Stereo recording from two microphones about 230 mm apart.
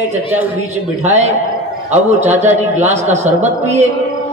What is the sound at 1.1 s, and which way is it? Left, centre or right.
A man's voice, right.